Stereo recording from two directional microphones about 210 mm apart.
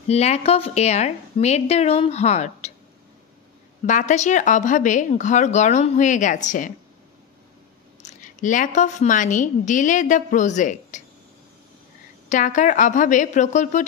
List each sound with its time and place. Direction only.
0.1 s speech: 30° left (ahead or behind)
3.8 s speech: 35° left (ahead or behind)
8.2 s speech: 35° left (ahead or behind)
12.3 s speech: 35° left (ahead or behind)